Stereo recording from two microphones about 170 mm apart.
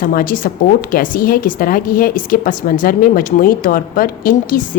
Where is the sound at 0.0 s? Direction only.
55° left (ahead or behind).